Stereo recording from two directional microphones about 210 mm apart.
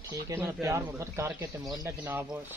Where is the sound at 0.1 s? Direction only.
15° right (ahead or behind).